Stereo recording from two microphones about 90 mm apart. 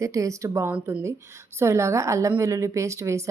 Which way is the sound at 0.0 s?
35° right (ahead or behind).